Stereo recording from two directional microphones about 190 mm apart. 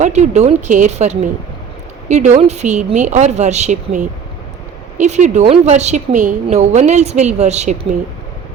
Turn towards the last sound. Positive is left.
turn(degrees=-35)  # may be behind; listen again after turning